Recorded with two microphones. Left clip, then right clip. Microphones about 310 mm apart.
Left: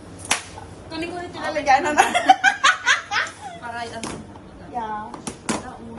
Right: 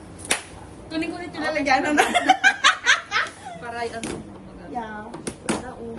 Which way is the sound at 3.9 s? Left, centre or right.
Centre.